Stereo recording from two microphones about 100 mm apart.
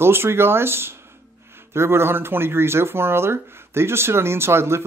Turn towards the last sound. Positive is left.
turn(degrees=-25)  # may be behind; listen again after turning